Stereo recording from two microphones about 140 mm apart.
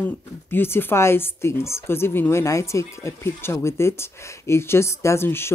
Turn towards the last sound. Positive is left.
turn(degrees=15)  # may be behind; listen again after turning